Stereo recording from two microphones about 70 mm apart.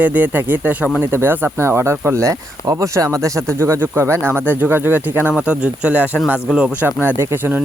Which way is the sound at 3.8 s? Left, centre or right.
Right.